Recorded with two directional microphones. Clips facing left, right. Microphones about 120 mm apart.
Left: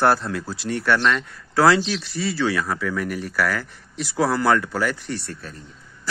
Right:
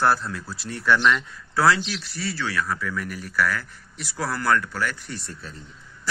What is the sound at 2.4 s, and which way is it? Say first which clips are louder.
Speech: left 4 dB; 90° left.